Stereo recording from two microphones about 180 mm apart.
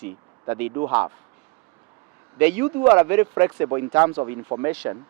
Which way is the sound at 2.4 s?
10° right (ahead or behind).